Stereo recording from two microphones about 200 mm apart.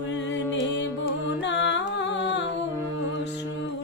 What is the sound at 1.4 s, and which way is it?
Music, 65° left (ahead or behind).